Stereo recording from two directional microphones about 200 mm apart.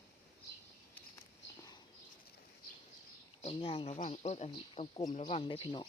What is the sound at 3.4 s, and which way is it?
Speech, 30° left (ahead or behind).